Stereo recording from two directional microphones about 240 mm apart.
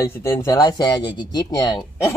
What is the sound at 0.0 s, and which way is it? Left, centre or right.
Speech, centre.